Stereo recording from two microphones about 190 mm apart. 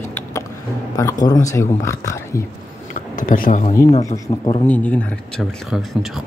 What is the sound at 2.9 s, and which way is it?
Speech, 45° left (ahead or behind).